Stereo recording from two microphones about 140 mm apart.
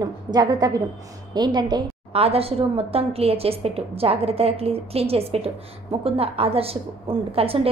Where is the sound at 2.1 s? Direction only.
45° right (ahead or behind).